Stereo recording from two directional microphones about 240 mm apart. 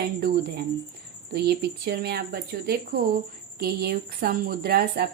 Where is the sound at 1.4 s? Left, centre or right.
Right.